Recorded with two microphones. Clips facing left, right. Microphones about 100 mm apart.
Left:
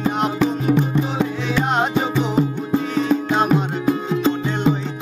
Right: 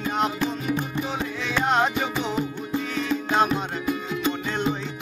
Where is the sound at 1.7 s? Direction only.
30° left (ahead or behind).